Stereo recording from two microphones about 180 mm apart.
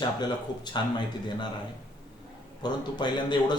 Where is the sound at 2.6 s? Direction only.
25° left (ahead or behind).